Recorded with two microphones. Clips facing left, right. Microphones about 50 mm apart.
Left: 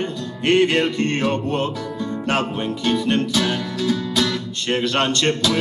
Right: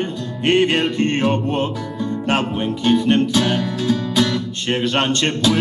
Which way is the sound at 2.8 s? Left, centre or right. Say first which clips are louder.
Right 5 dB; right.